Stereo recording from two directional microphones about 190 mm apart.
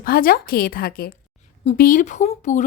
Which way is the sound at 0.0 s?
50° left (ahead or behind).